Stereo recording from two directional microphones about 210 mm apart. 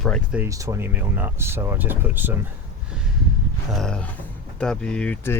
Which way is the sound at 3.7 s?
5° left (ahead or behind).